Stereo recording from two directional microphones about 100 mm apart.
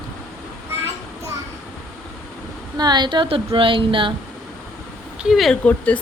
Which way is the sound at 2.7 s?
45° right (ahead or behind).